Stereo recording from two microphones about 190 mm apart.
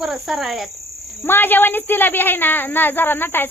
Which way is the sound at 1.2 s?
10° left (ahead or behind).